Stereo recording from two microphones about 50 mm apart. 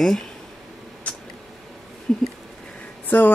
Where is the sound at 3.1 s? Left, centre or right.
Left.